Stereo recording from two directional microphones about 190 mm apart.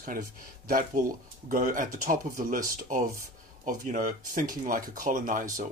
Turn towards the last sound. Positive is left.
turn(degrees=-45)  # may be behind; listen again after turning